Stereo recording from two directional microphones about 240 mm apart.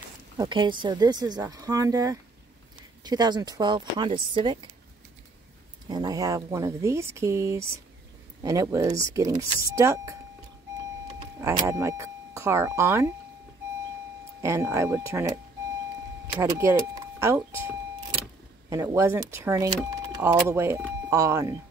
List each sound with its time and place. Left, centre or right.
0.4 s speech: centre
5.9 s speech: centre
14.4 s speech: centre
16.3 s speech: centre